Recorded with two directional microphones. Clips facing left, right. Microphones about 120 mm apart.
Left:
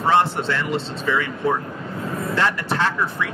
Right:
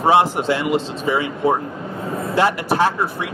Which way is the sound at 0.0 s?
15° right (ahead or behind).